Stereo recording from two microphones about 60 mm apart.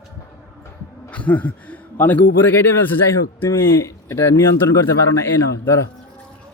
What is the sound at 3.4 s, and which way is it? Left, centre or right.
A man's voice, left.